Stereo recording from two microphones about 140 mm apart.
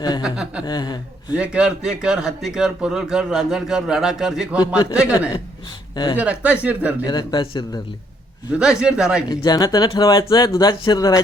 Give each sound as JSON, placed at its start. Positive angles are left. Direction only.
{"t": 0.2, "sound": "speech", "side_deg": -5}
{"t": 0.6, "sound": "speech", "side_deg": 30}
{"t": 1.4, "sound": "a man's voice", "side_deg": -5}
{"t": 7.0, "sound": "speech", "side_deg": 30}
{"t": 8.5, "sound": "a man's voice", "side_deg": -5}
{"t": 9.3, "sound": "speech", "side_deg": 30}